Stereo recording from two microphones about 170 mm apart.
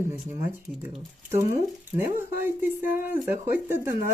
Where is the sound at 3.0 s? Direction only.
15° right (ahead or behind).